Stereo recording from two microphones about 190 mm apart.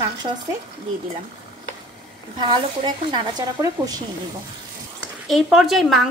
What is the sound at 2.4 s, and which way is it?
Speech, 25° right (ahead or behind).